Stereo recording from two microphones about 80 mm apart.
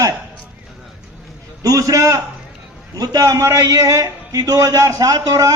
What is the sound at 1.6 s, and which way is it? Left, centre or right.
A man's voice, right.